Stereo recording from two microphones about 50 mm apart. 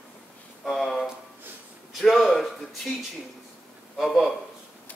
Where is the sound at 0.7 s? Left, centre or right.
Centre.